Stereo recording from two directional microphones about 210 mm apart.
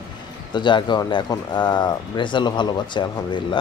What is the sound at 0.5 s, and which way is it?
Speech, 20° left (ahead or behind).